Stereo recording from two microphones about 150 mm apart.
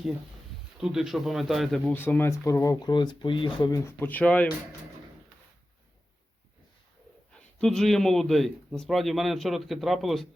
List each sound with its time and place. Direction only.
0.8 s a man's voice: 5° right (ahead or behind)
2.0 s speech: 15° left (ahead or behind)
4.0 s speech: 10° left (ahead or behind)
7.3 s a man's voice: 5° left (ahead or behind)